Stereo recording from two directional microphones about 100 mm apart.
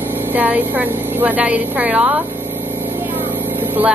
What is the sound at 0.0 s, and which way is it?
Vehicle, 20° right (ahead or behind).